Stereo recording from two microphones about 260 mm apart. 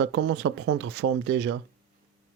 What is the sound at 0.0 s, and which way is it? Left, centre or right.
Speech, right.